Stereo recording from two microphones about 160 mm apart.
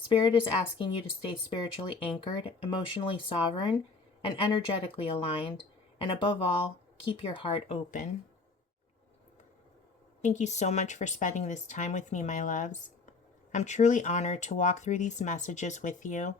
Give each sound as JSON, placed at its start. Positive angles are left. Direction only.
{"t": 0.1, "sound": "speech", "side_deg": 30}
{"t": 10.2, "sound": "speech", "side_deg": 50}